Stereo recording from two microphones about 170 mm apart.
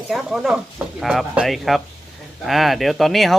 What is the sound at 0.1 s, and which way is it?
Speech, centre (ahead or behind).